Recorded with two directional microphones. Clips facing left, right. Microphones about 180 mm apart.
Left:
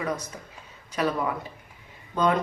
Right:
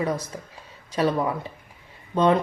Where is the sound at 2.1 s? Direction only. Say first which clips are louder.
Right 4 dB; 30° right (ahead or behind).